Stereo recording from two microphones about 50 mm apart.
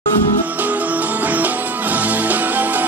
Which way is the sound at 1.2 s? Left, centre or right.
Right.